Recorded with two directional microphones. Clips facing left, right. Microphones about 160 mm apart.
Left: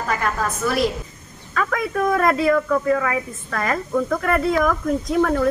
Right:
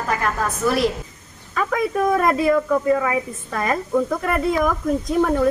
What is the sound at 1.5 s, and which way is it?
Speech, 20° right (ahead or behind).